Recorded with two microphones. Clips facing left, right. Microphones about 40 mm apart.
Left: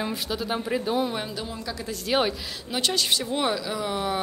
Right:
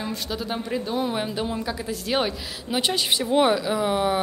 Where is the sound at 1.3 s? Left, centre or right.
Right.